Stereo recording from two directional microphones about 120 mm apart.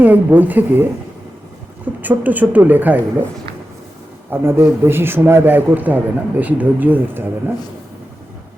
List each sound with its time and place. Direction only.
0.0 s a man's voice: 15° right (ahead or behind)
4.3 s a man's voice: 20° right (ahead or behind)